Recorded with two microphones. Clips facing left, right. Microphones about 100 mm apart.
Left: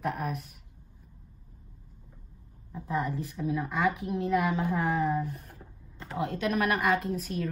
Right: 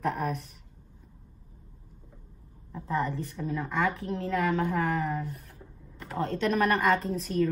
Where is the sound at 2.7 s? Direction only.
5° left (ahead or behind).